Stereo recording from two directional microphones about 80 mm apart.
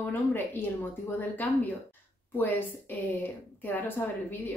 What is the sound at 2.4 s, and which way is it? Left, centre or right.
A woman's voice, left.